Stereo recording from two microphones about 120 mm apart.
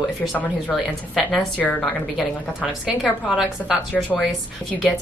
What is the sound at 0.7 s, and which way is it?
Speech, centre (ahead or behind).